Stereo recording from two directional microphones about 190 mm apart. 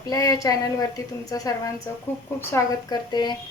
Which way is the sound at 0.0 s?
20° left (ahead or behind).